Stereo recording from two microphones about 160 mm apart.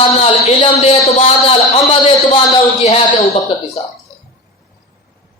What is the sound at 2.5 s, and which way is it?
Speech, 40° left (ahead or behind).